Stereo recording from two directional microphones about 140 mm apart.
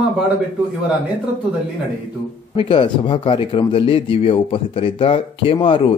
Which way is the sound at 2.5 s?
40° left (ahead or behind).